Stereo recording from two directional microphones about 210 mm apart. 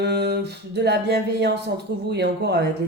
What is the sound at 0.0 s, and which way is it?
Speech, 55° right (ahead or behind).